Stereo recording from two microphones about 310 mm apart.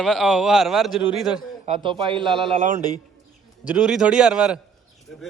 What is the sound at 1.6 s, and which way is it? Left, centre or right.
A man's voice, centre.